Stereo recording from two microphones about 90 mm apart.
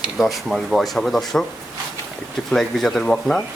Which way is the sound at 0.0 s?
Centre (ahead or behind).